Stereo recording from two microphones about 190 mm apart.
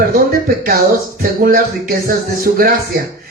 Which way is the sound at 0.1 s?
50° right (ahead or behind).